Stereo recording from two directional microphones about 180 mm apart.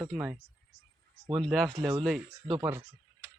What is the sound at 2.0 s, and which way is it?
Speech, centre (ahead or behind).